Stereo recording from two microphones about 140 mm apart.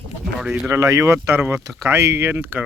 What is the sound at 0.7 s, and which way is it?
Speech, 20° right (ahead or behind).